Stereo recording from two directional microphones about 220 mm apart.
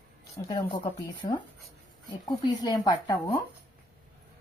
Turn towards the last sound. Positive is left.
turn(degrees=20)  # may be behind; listen again after turning